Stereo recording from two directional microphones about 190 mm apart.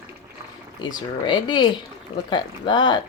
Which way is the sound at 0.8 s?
20° left (ahead or behind).